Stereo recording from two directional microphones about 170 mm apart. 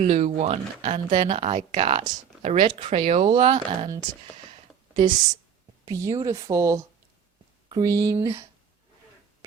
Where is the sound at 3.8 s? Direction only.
20° right (ahead or behind).